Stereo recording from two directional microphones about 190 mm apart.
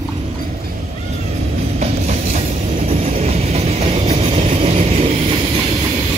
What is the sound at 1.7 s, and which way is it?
Music, 35° right (ahead or behind).